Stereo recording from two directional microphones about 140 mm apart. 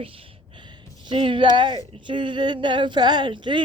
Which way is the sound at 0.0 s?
40° right (ahead or behind).